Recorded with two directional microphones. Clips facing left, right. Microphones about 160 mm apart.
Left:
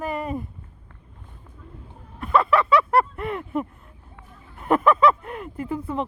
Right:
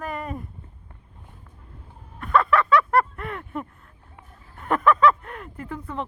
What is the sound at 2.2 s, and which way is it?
Vehicle, 5° left (ahead or behind).